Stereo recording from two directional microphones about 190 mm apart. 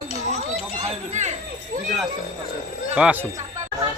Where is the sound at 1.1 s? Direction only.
40° right (ahead or behind).